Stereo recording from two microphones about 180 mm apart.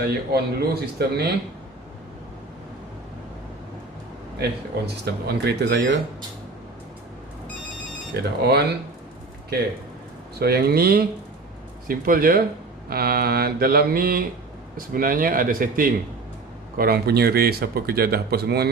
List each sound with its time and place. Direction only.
0.0 s speech: 60° right (ahead or behind)
5.0 s speech: 65° right (ahead or behind)
8.1 s speech: 65° right (ahead or behind)
10.4 s speech: 60° right (ahead or behind)